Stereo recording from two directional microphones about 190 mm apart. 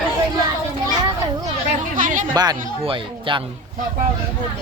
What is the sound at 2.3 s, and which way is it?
Speech, 20° right (ahead or behind).